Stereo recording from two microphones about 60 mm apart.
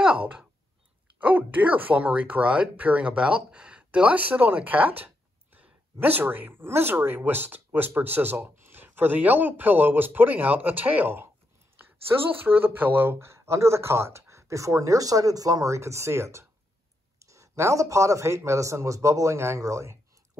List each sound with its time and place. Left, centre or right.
0.0 s a sound: centre
1.2 s speech: right
13.3 s a man's voice: right